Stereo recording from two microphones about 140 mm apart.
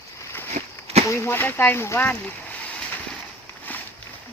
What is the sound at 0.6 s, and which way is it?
Walk, 55° right (ahead or behind).